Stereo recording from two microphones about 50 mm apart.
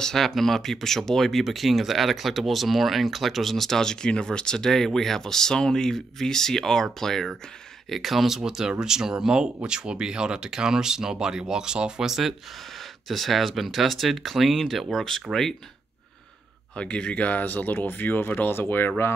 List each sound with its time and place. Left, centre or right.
0.0 s speech: centre
7.9 s speech: centre
15.3 s speech: right
16.8 s speech: left